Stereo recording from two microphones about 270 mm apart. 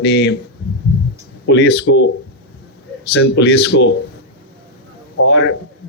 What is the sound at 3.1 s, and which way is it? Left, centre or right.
Speech, left.